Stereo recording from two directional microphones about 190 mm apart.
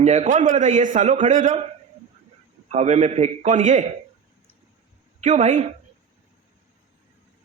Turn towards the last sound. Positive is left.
turn(degrees=-40)  # may be behind; listen again after turning